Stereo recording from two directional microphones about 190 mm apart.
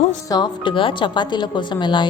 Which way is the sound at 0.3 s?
20° left (ahead or behind).